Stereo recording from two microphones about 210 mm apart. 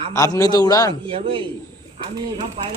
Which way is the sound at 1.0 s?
25° right (ahead or behind).